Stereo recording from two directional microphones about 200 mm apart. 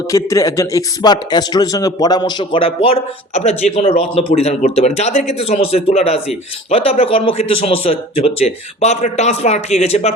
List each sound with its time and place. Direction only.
0.1 s speech: 15° left (ahead or behind); by 10.1 s 30° left (ahead or behind)